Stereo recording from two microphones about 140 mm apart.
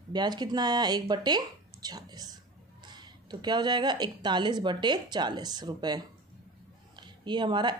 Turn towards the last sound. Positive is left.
turn(degrees=-35)  # may be behind; listen again after turning